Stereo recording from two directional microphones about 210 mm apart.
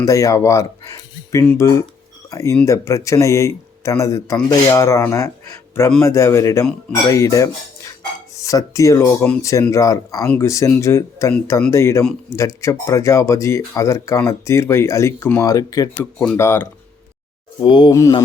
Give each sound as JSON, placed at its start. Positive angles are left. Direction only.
{"t": 0.0, "sound": "speech", "side_deg": 15}
{"t": 17.6, "sound": "speech", "side_deg": 20}